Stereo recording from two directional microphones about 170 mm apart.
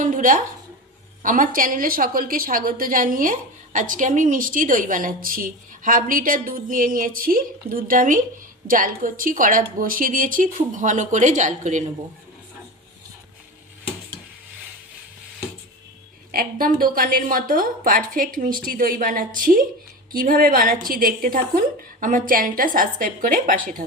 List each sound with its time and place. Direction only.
0.0 s a woman's voice: 50° right (ahead or behind)
16.3 s a woman's voice: 55° right (ahead or behind)